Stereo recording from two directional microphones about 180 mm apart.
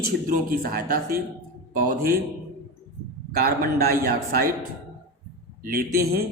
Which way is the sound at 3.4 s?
60° right (ahead or behind).